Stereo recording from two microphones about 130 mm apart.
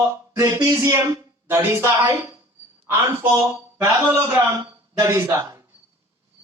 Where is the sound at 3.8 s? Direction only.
25° right (ahead or behind).